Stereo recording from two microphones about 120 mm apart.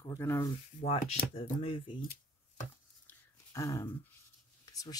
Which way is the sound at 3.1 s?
25° left (ahead or behind).